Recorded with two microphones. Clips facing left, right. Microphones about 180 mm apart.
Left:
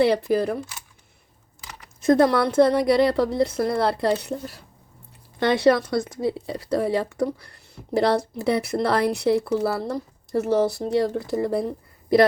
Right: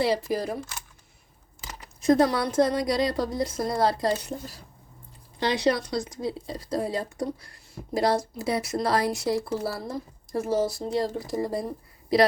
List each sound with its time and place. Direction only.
0.0 s speech: 60° left (ahead or behind)
2.0 s speech: 55° left (ahead or behind)